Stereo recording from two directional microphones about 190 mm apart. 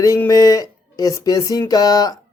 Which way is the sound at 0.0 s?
15° left (ahead or behind).